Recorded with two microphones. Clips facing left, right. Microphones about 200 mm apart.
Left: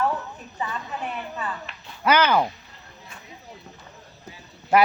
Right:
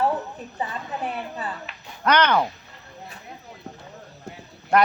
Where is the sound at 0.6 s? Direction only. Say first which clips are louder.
Right 1 dB; 30° right (ahead or behind).